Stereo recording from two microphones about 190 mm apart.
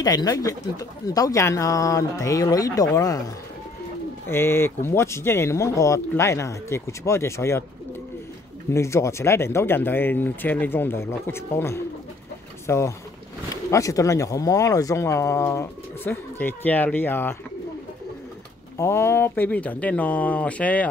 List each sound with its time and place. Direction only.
0.0 s speech: 20° left (ahead or behind)
4.3 s speech: 10° left (ahead or behind)
8.7 s speech: 15° left (ahead or behind)
18.8 s speech: 15° left (ahead or behind)